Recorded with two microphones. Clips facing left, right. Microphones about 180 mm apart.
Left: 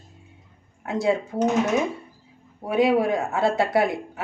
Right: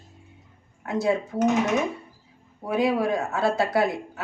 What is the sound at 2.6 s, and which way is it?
Speech, 25° left (ahead or behind).